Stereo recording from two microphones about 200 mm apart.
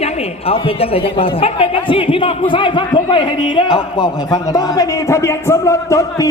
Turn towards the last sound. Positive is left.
turn(degrees=15)  # may be behind; listen again after turning